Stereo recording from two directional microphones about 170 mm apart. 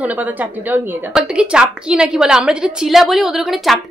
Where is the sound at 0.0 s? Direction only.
10° right (ahead or behind).